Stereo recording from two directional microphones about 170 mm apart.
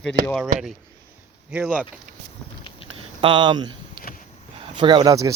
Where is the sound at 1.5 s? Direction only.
5° right (ahead or behind).